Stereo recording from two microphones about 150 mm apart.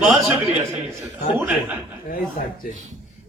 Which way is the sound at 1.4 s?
10° right (ahead or behind).